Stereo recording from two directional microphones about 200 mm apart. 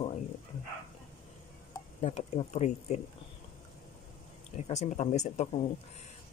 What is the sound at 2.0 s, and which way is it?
Speech, 35° left (ahead or behind).